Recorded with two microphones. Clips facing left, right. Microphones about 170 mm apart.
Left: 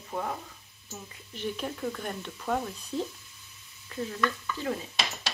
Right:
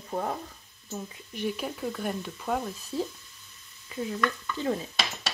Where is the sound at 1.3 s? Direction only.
10° right (ahead or behind).